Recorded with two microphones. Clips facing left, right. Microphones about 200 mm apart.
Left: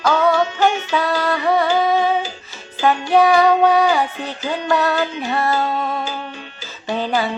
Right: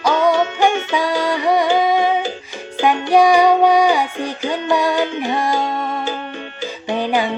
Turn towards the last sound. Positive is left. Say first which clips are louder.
# right 2 dB
turn(degrees=-15)  # may be behind; listen again after turning